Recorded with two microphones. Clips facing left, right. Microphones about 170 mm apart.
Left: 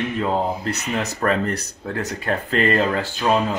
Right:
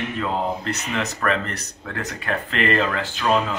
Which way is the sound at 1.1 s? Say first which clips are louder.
Left 3 dB; 40° left (ahead or behind).